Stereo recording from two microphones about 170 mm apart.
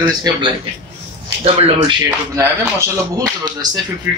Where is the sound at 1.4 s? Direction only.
35° right (ahead or behind).